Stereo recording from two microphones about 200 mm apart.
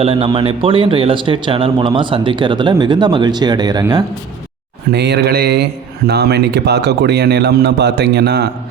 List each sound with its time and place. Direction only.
0.0 s a man's voice: 25° right (ahead or behind)
4.9 s a man's voice: 55° right (ahead or behind)